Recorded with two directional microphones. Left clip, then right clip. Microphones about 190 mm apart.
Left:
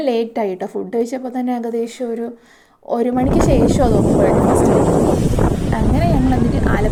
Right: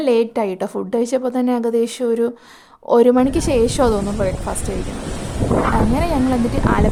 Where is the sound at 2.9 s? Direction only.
20° right (ahead or behind).